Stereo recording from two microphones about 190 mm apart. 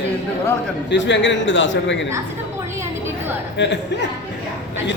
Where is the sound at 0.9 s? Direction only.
70° left (ahead or behind).